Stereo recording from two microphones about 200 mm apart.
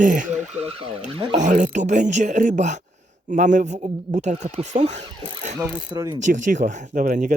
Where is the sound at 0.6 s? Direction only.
30° right (ahead or behind).